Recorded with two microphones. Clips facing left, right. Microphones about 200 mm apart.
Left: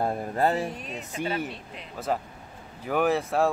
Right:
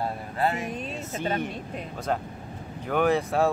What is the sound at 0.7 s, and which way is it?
Speech, 25° right (ahead or behind).